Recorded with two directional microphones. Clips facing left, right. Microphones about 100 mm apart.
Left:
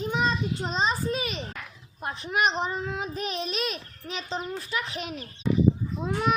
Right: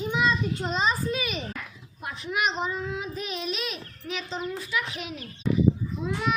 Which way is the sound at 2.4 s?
55° left (ahead or behind).